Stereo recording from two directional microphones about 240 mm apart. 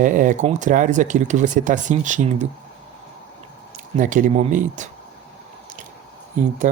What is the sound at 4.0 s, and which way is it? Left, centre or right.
Speech, right.